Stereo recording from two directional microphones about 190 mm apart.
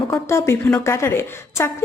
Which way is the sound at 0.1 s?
15° left (ahead or behind).